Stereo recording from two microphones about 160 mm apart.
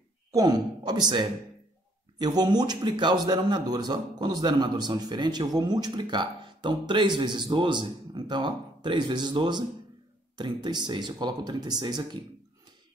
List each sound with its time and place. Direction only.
0.3 s a man's voice: 25° right (ahead or behind)